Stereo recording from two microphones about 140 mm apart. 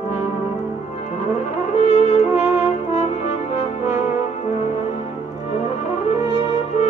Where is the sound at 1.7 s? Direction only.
50° left (ahead or behind).